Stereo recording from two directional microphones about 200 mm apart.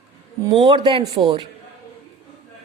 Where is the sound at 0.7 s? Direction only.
25° right (ahead or behind).